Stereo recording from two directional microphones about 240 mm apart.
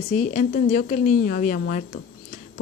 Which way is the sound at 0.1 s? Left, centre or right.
Left.